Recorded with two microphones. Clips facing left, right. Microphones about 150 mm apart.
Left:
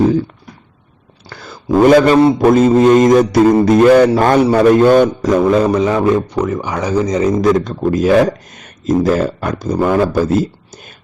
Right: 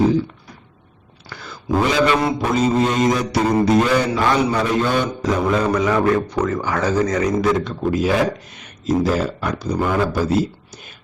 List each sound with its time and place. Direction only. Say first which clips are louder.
1.8 s speech: left 10 dB; 50° left (ahead or behind)
5.5 s a man's voice: left 5 dB; 25° left (ahead or behind)
7.3 s speech: left 5 dB; 40° left (ahead or behind)